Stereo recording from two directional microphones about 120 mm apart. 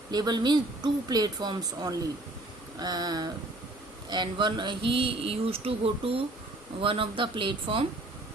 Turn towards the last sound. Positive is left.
turn(degrees=-45)  # may be behind; listen again after turning